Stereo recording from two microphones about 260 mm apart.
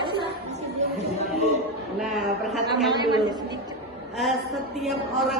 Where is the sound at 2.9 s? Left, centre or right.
Centre.